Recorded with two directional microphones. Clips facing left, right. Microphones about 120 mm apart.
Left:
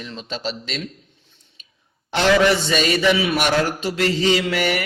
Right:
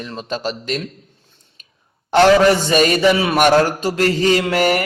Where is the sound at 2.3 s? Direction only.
40° right (ahead or behind).